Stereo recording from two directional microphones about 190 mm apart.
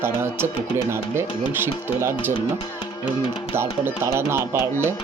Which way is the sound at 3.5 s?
10° right (ahead or behind).